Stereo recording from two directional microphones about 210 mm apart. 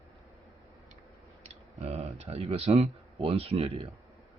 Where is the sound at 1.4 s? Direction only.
30° right (ahead or behind).